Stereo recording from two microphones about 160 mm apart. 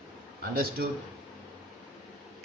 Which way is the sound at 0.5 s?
70° right (ahead or behind).